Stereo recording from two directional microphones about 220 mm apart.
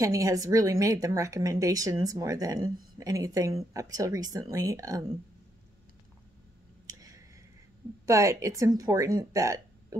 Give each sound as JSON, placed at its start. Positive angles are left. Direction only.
{"t": 0.0, "sound": "speech", "side_deg": -15}
{"t": 6.9, "sound": "a sound", "side_deg": -15}
{"t": 8.1, "sound": "speech", "side_deg": -15}